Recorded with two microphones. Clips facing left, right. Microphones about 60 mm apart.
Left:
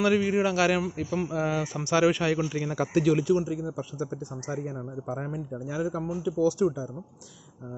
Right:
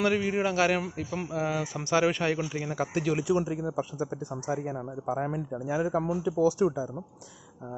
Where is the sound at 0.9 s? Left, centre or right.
Centre; by 2.3 s right.